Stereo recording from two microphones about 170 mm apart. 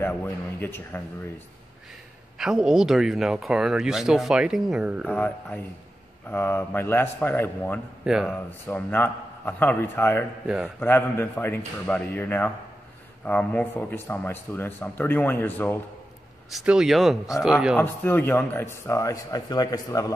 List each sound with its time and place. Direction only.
0.0 s a man's voice: 10° left (ahead or behind)
2.3 s speech: 5° right (ahead or behind)
5.0 s a man's voice: 10° left (ahead or behind)
8.0 s speech: 5° right (ahead or behind)
8.5 s a man's voice: 10° left (ahead or behind)
10.4 s speech: 5° right (ahead or behind)
10.8 s a man's voice: 10° left (ahead or behind)
16.4 s speech: 5° right (ahead or behind)
17.7 s a man's voice: 10° left (ahead or behind)